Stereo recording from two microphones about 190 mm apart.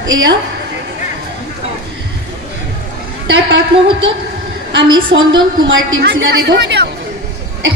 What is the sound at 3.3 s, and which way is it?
Speech, 70° right (ahead or behind).